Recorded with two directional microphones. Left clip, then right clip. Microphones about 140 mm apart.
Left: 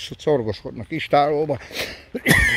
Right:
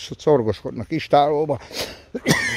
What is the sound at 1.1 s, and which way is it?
Speech, 20° right (ahead or behind).